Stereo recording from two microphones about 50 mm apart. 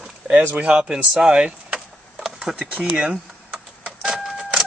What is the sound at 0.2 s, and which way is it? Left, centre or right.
Speech, centre.